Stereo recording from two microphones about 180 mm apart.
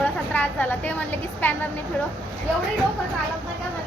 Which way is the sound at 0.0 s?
10° left (ahead or behind).